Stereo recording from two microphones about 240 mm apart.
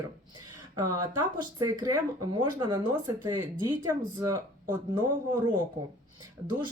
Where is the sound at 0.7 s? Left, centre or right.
Centre.